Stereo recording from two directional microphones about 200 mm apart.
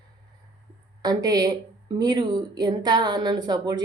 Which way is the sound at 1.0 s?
20° right (ahead or behind).